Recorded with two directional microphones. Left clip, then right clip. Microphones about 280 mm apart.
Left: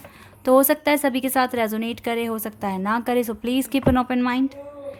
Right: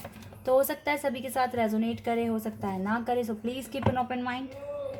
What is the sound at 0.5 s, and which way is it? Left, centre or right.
A woman's voice, left.